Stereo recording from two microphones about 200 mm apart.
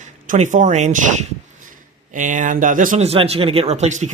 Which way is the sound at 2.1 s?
40° right (ahead or behind).